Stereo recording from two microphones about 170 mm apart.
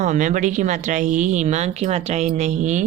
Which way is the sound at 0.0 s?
45° right (ahead or behind).